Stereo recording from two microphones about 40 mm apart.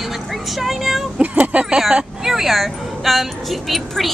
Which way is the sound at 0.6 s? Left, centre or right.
Centre.